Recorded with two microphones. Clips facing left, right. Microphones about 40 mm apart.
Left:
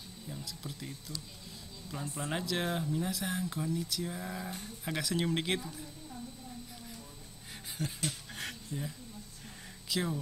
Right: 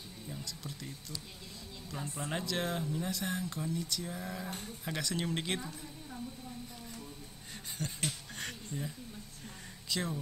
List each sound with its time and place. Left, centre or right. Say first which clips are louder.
0.3 s speech: left 1 dB; centre
2.1 s speech: left 1 dB; centre
7.8 s speech: left 2 dB; centre
8.4 s a sound: left 1 dB; centre
9.8 s speech: left 2 dB; centre